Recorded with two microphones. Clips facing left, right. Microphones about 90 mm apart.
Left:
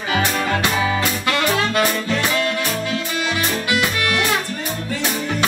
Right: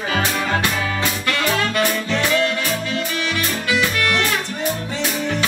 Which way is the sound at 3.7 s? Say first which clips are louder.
Right 2 dB; 15° left (ahead or behind).